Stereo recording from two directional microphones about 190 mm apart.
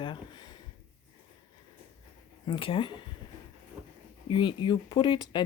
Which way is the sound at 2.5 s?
25° left (ahead or behind).